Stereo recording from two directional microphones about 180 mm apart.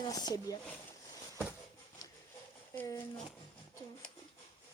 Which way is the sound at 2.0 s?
20° left (ahead or behind).